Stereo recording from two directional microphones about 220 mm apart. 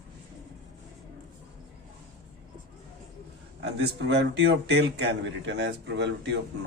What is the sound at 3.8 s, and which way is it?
A man's voice, 50° right (ahead or behind).